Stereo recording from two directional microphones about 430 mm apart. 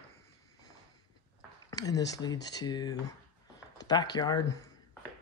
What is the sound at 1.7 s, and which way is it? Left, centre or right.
Speech, centre.